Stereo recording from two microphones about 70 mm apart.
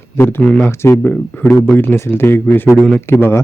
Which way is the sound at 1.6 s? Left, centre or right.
Left.